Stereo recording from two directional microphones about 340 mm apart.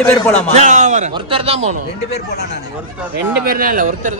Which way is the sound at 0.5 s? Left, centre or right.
Right.